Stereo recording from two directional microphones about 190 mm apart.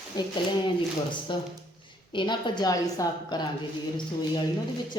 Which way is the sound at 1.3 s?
25° left (ahead or behind).